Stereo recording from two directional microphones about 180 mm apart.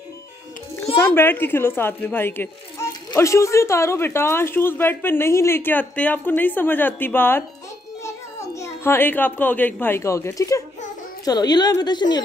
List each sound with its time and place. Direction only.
1.0 s speech: 10° left (ahead or behind)
8.5 s a woman's voice: 15° left (ahead or behind)